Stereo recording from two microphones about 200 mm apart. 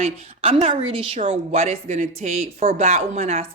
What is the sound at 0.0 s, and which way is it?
A woman's voice, 30° right (ahead or behind).